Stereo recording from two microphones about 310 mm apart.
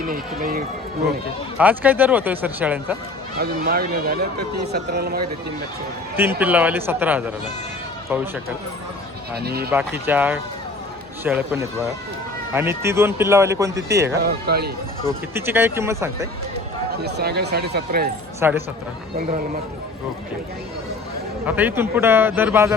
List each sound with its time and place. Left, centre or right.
0.1 s speech: right
1.5 s speech: centre
3.4 s speech: right
6.1 s speech: centre
9.3 s speech: right
9.6 s speech: centre
14.2 s speech: right
15.4 s speech: centre
17.0 s speech: right
18.3 s speech: centre
21.4 s speech: centre